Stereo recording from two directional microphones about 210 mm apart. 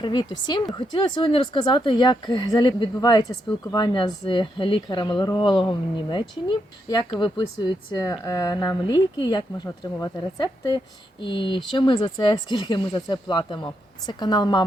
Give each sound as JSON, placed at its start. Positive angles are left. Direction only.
{"t": 0.0, "sound": "speech", "side_deg": 20}